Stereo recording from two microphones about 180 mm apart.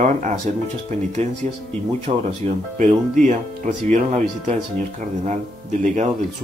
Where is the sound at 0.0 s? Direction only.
45° right (ahead or behind).